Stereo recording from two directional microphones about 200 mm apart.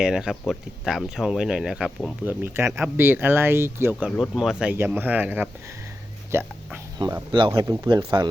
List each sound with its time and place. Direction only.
0.0 s speech: 5° right (ahead or behind)
2.4 s speech: 10° right (ahead or behind)
4.2 s speech: centre (ahead or behind); by 8.3 s 20° right (ahead or behind)